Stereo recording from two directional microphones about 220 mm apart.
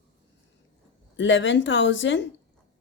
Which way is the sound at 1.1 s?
55° left (ahead or behind).